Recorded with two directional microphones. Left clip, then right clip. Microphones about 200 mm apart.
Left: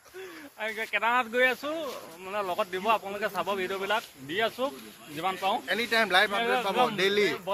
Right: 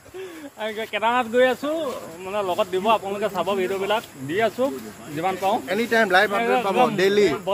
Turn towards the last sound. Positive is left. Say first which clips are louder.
# right 7 dB
turn(degrees=-20)  # may be behind; listen again after turning